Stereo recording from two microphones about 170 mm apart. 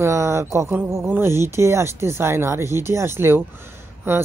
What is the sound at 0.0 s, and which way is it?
Speech, 15° right (ahead or behind).